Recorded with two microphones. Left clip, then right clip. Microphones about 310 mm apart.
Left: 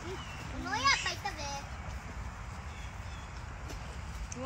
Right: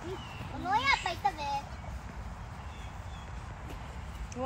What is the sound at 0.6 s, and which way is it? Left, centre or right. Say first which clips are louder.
Children playing: right 2 dB; centre.